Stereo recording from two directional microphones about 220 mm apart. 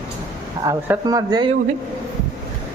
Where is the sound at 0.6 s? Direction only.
15° right (ahead or behind).